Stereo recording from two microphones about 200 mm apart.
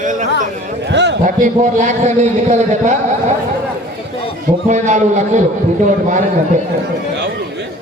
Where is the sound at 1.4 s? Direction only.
40° right (ahead or behind).